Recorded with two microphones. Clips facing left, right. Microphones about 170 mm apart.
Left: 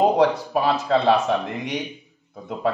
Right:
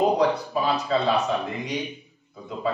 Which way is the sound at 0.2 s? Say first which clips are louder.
Left 3 dB; 70° left (ahead or behind).